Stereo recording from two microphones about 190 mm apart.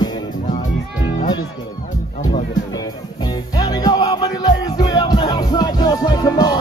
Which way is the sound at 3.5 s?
20° left (ahead or behind).